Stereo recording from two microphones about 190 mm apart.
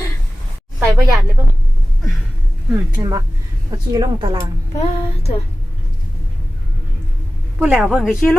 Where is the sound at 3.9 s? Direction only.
20° right (ahead or behind).